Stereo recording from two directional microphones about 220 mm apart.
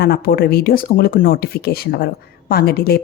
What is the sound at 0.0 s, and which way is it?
A woman's voice, 45° left (ahead or behind).